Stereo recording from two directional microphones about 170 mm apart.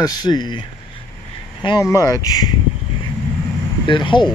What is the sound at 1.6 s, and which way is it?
Speech, 25° left (ahead or behind).